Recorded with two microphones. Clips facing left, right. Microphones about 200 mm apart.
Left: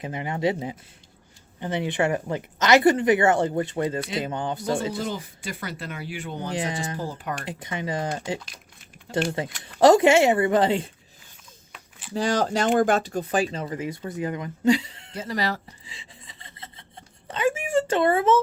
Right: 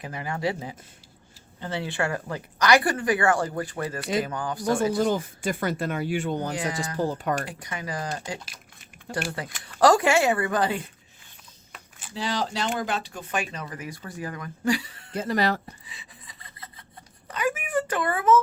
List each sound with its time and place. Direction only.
0.0 s speech: 20° left (ahead or behind)
4.9 s speech: 50° right (ahead or behind)
6.5 s speech: 25° left (ahead or behind)
9.1 s speech: 55° right (ahead or behind)
9.6 s speech: 25° left (ahead or behind)
12.1 s speech: 45° left (ahead or behind); by 15.1 s 25° left (ahead or behind)
15.1 s speech: 55° right (ahead or behind)
15.9 s sawing: 25° left (ahead or behind)
17.2 s a sound: 25° left (ahead or behind)